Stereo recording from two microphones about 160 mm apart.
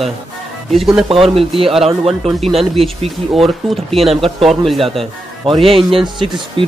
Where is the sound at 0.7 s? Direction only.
Centre (ahead or behind).